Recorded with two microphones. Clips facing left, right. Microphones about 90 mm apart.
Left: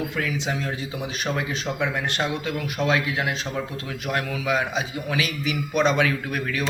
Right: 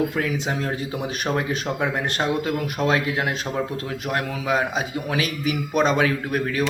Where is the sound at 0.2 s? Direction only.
45° right (ahead or behind).